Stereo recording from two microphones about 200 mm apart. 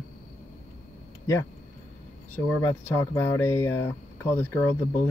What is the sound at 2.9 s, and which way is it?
Speech, 15° left (ahead or behind).